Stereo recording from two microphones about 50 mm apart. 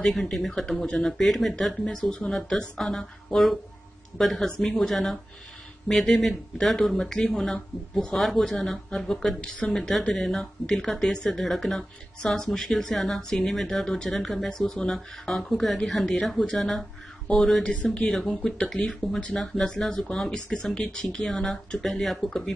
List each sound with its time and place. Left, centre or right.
0.0 s speech: centre
1.0 s speech: centre
1.9 s speech: centre
2.8 s speech: centre
20.7 s speech: left
21.2 s speech: centre